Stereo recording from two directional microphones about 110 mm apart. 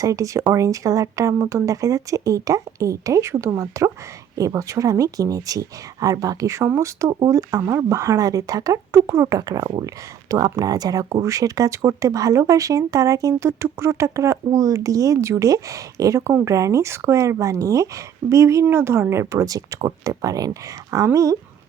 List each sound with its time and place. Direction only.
0.0 s speech: 30° right (ahead or behind)